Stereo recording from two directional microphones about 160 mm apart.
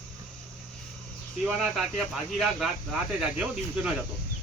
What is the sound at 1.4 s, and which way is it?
Speech, 5° right (ahead or behind).